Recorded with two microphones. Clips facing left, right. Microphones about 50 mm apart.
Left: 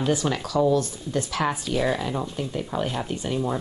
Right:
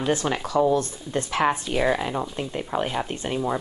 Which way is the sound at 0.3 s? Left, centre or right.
Right.